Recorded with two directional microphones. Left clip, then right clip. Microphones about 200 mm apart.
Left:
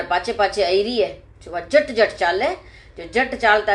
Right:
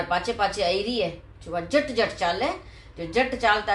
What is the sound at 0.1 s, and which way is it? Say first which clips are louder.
A woman's voice: left 7 dB; 20° left (ahead or behind).